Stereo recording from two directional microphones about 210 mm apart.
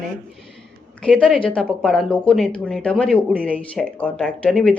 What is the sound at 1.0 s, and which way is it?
Speech, 5° left (ahead or behind).